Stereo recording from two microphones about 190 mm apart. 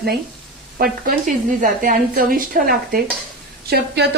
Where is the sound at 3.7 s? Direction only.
60° right (ahead or behind).